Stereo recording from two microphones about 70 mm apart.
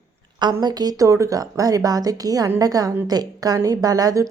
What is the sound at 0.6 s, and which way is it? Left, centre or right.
A woman's voice, right.